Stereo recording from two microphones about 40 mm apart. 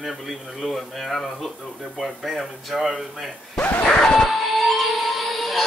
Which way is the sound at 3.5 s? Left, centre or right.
Left.